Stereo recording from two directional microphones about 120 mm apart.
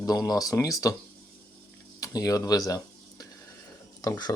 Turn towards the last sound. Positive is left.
turn(degrees=35)  # may be behind; listen again after turning